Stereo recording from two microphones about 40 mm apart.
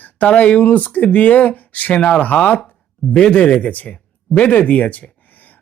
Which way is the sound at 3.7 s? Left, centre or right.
Left.